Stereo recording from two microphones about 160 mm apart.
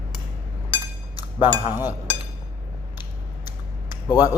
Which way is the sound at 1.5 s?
15° right (ahead or behind).